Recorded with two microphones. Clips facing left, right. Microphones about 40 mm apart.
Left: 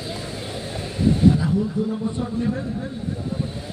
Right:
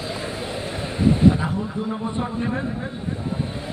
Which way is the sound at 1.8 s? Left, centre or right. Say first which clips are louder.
Left 1 dB; right.